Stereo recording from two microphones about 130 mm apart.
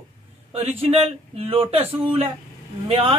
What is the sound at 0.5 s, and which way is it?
Speech, 50° right (ahead or behind).